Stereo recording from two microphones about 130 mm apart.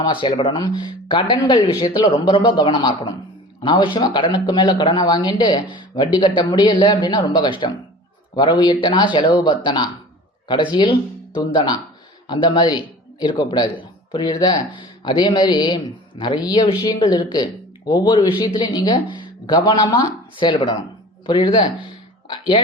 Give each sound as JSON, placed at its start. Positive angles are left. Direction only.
{"t": 0.0, "sound": "speech", "side_deg": 40}
{"t": 12.3, "sound": "speech", "side_deg": 35}